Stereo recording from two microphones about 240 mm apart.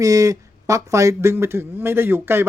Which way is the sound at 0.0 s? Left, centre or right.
Centre.